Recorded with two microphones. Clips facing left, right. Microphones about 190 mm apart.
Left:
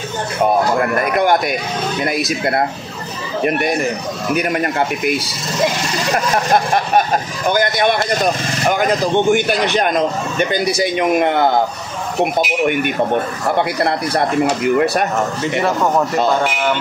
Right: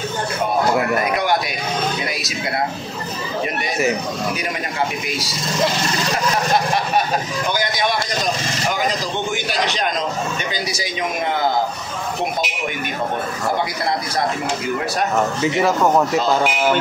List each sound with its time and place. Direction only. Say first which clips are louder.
2.0 s speech: left 7 dB; 55° left (ahead or behind)
4.4 s speech: left 6 dB; 55° left (ahead or behind)
13.8 s speech: left 4 dB; 60° left (ahead or behind)
15.6 s speech: even; 5° right (ahead or behind)